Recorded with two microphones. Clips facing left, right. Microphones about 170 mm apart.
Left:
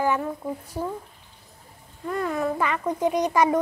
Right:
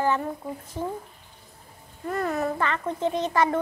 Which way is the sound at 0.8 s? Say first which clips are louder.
Even; 40° left (ahead or behind).